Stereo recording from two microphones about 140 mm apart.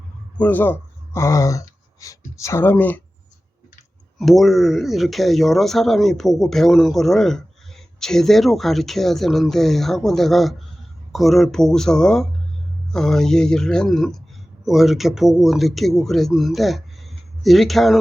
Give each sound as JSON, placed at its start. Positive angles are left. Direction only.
{"t": 0.3, "sound": "speech", "side_deg": 10}
{"t": 4.2, "sound": "speech", "side_deg": 0}